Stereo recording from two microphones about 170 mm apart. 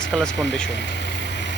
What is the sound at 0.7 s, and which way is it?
Vehicle, 90° left.